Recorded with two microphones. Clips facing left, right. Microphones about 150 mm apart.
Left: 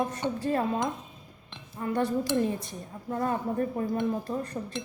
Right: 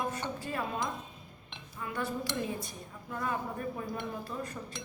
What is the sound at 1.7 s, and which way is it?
Speech, 40° left (ahead or behind).